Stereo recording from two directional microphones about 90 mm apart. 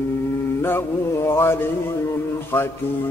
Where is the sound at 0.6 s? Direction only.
25° left (ahead or behind).